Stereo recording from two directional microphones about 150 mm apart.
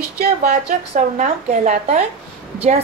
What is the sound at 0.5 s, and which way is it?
A woman's voice, 55° right (ahead or behind).